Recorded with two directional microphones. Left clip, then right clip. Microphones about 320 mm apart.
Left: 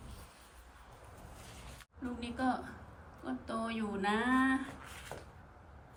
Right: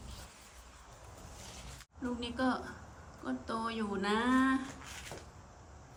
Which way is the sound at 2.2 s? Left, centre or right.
Centre.